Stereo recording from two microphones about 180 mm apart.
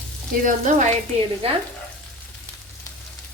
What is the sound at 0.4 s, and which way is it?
Frying, 45° right (ahead or behind).